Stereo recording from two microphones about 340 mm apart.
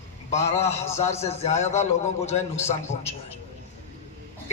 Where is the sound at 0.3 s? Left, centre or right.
Centre.